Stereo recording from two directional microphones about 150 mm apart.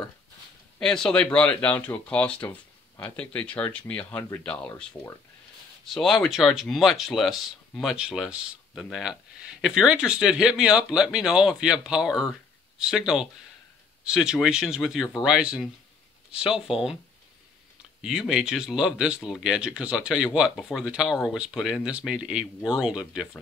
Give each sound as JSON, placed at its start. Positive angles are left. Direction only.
{"t": 0.7, "sound": "speech", "side_deg": 5}
{"t": 16.4, "sound": "speech", "side_deg": 35}
{"t": 18.0, "sound": "speech", "side_deg": -5}